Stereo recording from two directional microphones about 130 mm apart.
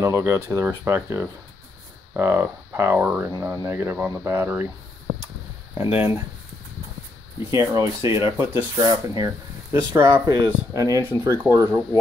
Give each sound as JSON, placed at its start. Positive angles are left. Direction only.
{"t": 0.0, "sound": "speech", "side_deg": -20}
{"t": 5.8, "sound": "speech", "side_deg": -15}
{"t": 7.5, "sound": "speech", "side_deg": -25}